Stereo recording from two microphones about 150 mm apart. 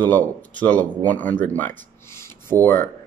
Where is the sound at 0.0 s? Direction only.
10° left (ahead or behind).